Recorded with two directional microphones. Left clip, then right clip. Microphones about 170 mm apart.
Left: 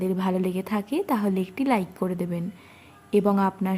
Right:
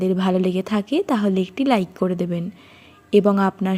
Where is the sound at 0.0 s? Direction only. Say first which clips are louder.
Right 6 dB; 20° right (ahead or behind).